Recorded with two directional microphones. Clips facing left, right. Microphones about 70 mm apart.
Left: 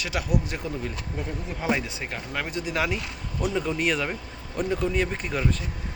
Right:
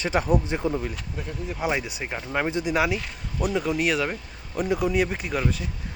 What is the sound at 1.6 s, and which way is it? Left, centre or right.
Speech, centre.